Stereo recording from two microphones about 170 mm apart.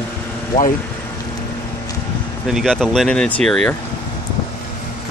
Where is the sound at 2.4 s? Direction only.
Centre (ahead or behind).